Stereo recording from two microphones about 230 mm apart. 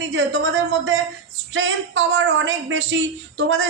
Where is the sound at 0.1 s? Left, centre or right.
Right.